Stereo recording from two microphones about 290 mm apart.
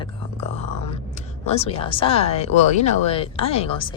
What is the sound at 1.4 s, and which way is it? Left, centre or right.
A woman's voice, left.